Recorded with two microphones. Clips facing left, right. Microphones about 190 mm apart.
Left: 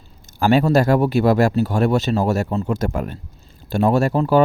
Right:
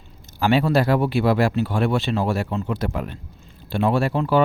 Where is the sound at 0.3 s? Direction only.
45° left (ahead or behind).